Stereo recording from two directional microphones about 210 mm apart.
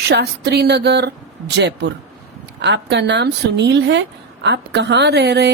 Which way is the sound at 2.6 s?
55° right (ahead or behind).